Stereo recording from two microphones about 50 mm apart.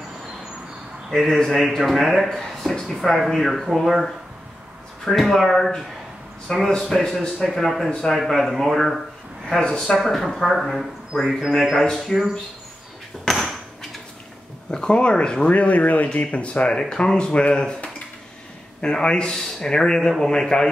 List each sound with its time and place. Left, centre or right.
1.1 s speech: centre
6.8 s speech: centre
11.1 s a man's voice: centre
11.9 s speech: centre
13.3 s a sound: centre
14.7 s speech: centre
18.8 s speech: centre